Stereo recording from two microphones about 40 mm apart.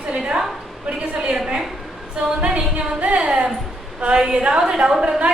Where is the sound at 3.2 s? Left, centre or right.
Right.